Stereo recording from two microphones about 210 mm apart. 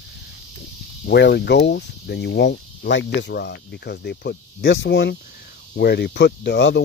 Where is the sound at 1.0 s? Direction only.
50° left (ahead or behind).